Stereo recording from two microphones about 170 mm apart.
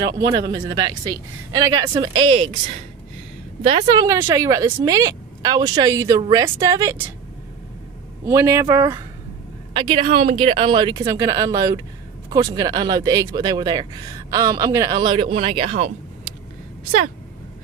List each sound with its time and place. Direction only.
0.4 s speech: 25° right (ahead or behind)
3.8 s speech: 25° right (ahead or behind)
8.3 s speech: 15° right (ahead or behind)
9.8 s speech: 30° right (ahead or behind)